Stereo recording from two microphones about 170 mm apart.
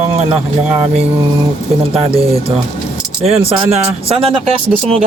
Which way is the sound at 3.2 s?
35° right (ahead or behind).